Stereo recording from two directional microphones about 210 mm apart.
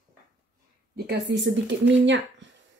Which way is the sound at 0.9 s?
55° right (ahead or behind).